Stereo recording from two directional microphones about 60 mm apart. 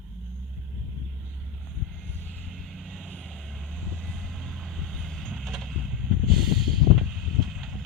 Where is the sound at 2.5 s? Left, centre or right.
Centre.